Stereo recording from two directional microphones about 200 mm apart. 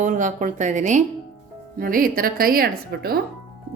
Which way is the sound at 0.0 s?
40° right (ahead or behind).